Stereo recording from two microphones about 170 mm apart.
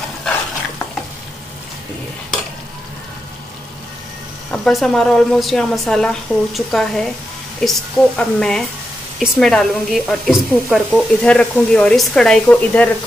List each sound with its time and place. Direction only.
4.5 s a woman's voice: centre (ahead or behind)